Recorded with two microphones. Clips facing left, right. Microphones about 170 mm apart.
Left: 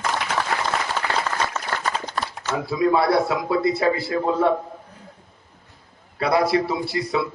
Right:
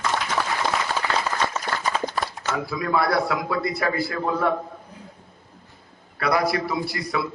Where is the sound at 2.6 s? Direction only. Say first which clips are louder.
Left 6 dB; 25° left (ahead or behind).